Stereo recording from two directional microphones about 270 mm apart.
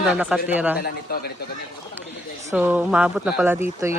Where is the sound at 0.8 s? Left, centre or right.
Left.